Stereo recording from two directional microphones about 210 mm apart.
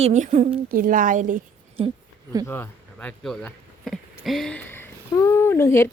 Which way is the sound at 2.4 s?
10° left (ahead or behind).